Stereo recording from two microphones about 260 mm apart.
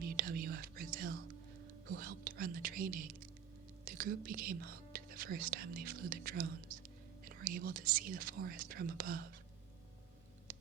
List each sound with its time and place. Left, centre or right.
0.0 s whispering: right
7.3 s speech: right